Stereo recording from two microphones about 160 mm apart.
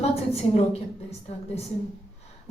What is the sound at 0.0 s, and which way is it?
A woman's voice, 40° left (ahead or behind).